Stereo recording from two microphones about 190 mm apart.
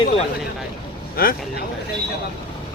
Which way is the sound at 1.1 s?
50° left (ahead or behind).